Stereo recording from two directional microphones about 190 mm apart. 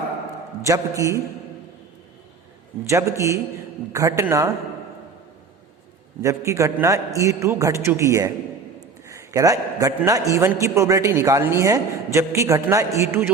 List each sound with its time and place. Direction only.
0.6 s a man's voice: 15° right (ahead or behind)
2.9 s a man's voice: 15° right (ahead or behind)
6.2 s a man's voice: 15° right (ahead or behind)